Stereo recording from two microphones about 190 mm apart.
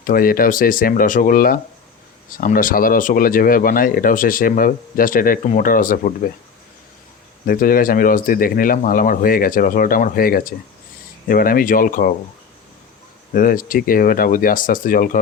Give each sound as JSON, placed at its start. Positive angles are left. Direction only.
{"t": 0.0, "sound": "speech", "side_deg": 50}
{"t": 7.4, "sound": "speech", "side_deg": 50}
{"t": 13.3, "sound": "speech", "side_deg": 50}